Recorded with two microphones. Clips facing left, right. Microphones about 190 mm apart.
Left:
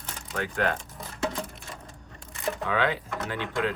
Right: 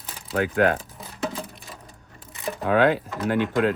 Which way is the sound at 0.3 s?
55° right (ahead or behind).